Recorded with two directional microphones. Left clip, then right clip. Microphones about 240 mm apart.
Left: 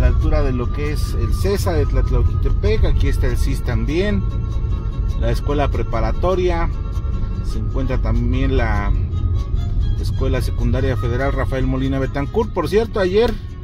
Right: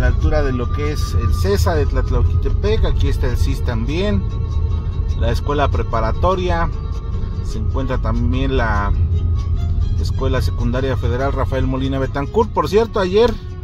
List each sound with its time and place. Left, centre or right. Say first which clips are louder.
0.4 s speech: right 3 dB; right
5.3 s speech: right 2 dB; right
7.7 s speech: right 2 dB; right
10.2 s speech: right 2 dB; right